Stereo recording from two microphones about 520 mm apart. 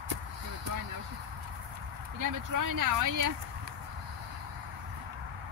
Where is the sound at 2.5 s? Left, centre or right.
Right.